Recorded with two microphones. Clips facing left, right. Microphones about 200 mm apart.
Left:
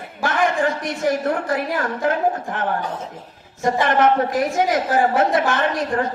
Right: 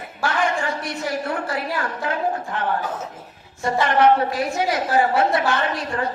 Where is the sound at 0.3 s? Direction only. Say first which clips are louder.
Left 3 dB; 50° left (ahead or behind).